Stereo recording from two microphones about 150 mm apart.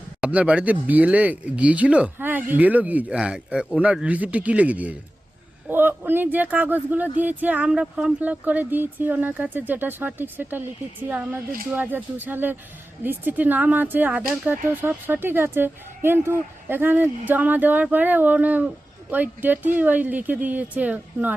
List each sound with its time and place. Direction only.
0.2 s speech: 10° right (ahead or behind)